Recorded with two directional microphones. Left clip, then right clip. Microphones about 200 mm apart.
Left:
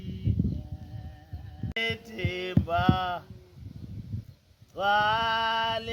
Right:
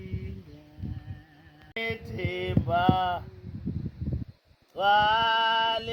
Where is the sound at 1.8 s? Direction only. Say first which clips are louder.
Left 1 dB; 5° left (ahead or behind).